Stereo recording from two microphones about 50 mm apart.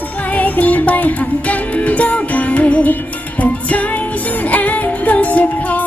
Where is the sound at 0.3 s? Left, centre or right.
Left.